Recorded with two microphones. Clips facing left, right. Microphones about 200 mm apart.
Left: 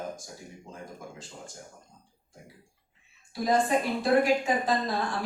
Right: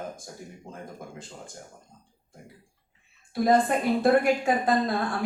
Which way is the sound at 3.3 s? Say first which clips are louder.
Right 3 dB; 55° right (ahead or behind).